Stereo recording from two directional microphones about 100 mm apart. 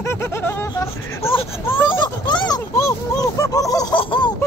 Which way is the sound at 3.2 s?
35° left (ahead or behind).